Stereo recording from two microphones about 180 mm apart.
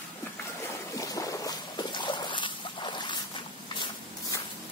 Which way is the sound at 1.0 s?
20° left (ahead or behind).